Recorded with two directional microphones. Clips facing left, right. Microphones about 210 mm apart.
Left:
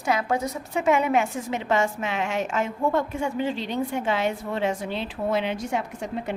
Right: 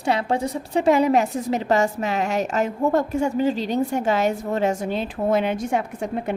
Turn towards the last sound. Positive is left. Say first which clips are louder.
# right 4 dB
turn(degrees=-55)  # may be behind; listen again after turning